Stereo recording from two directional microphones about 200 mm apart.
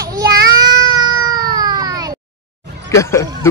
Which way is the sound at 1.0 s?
20° right (ahead or behind).